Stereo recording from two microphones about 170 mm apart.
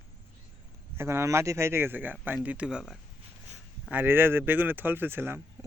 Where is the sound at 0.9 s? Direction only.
15° right (ahead or behind).